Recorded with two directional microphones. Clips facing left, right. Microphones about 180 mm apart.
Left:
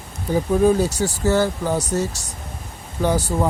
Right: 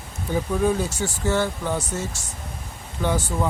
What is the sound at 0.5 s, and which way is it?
Speech, 35° left (ahead or behind).